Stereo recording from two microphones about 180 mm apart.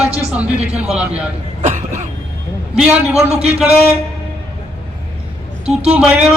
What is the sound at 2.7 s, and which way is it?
Speech, 5° right (ahead or behind).